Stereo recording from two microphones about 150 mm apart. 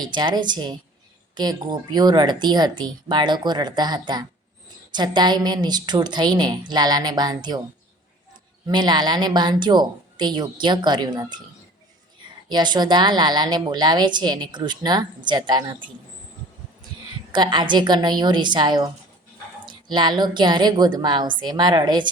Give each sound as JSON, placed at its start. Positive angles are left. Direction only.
{"t": 0.0, "sound": "a woman's voice", "side_deg": -30}
{"t": 8.6, "sound": "a woman's voice", "side_deg": -30}
{"t": 12.5, "sound": "a woman's voice", "side_deg": -30}
{"t": 17.3, "sound": "a woman's voice", "side_deg": -30}